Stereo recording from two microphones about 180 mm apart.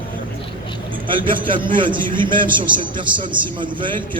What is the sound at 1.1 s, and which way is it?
A man's voice, 30° right (ahead or behind).